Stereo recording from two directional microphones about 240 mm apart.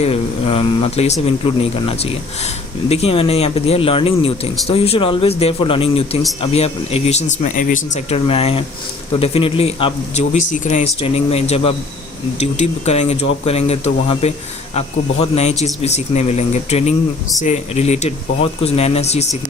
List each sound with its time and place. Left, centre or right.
0.0 s speech: left